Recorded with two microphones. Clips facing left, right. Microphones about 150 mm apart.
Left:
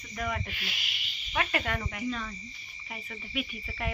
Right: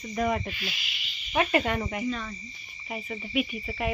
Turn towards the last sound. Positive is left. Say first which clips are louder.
# right 6 dB
turn(degrees=-15)  # may be behind; listen again after turning